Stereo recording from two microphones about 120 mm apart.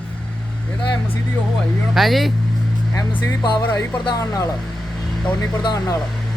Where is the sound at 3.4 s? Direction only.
35° left (ahead or behind).